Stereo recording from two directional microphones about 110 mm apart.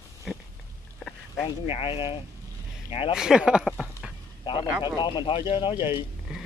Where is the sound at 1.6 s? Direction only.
60° left (ahead or behind).